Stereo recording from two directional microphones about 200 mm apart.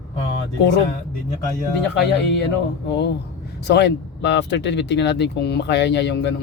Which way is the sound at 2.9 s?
55° left (ahead or behind).